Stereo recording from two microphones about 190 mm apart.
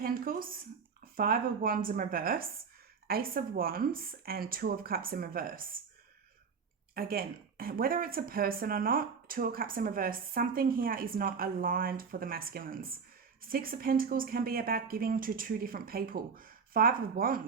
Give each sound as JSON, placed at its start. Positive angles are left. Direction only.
{"t": 0.0, "sound": "a sound", "side_deg": -50}
{"t": 1.1, "sound": "speech", "side_deg": -50}
{"t": 6.9, "sound": "speech", "side_deg": -50}